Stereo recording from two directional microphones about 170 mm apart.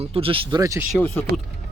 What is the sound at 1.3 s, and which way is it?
Speech, 65° right (ahead or behind).